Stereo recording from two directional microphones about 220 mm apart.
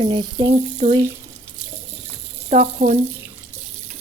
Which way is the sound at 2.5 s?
30° right (ahead or behind).